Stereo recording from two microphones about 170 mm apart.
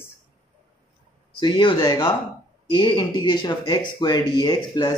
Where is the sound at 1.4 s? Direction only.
25° left (ahead or behind).